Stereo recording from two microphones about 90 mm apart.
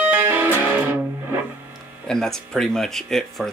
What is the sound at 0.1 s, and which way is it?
Music, 20° right (ahead or behind).